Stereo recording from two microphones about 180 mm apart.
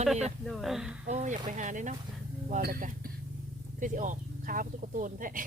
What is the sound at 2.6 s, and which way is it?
Speech, 60° right (ahead or behind).